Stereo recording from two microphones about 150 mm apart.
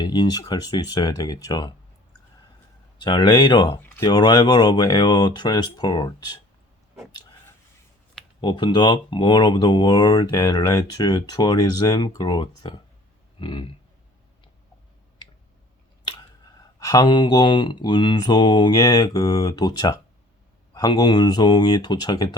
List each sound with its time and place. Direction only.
0.0 s speech: 30° left (ahead or behind)
3.0 s speech: 30° left (ahead or behind)
8.4 s speech: 30° left (ahead or behind)
16.8 s speech: 25° left (ahead or behind)